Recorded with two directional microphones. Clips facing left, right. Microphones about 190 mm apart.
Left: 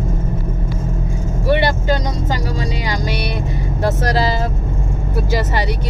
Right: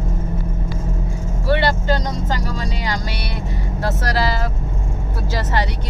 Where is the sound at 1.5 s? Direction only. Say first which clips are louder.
Left 2 dB; 15° left (ahead or behind).